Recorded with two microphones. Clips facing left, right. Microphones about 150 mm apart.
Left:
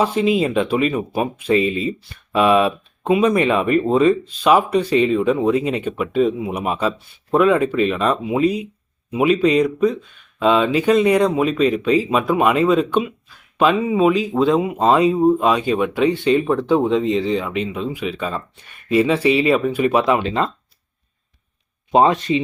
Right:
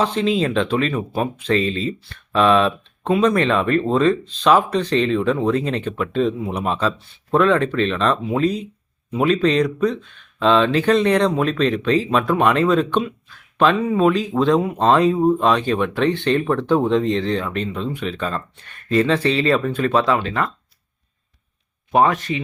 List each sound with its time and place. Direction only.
0.0 s speech: 10° left (ahead or behind)
21.9 s speech: 20° left (ahead or behind)